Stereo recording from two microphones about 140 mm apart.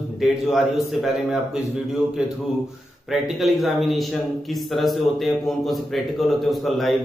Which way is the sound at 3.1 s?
Centre (ahead or behind).